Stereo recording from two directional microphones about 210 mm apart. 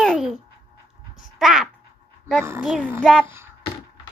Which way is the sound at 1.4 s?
Centre (ahead or behind).